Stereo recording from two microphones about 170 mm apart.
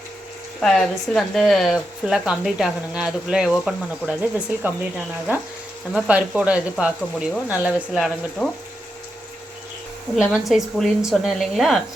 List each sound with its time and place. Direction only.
0.6 s speech: centre (ahead or behind)
5.9 s speech: 5° right (ahead or behind)
10.2 s speech: 5° right (ahead or behind)